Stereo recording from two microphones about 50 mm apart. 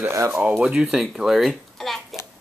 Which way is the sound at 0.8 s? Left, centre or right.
Centre.